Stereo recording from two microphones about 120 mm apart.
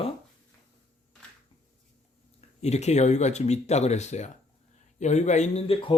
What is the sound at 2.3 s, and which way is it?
Speech, 65° left (ahead or behind).